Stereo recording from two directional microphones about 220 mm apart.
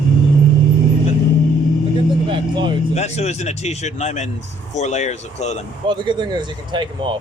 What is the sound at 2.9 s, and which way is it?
Speech, 30° left (ahead or behind).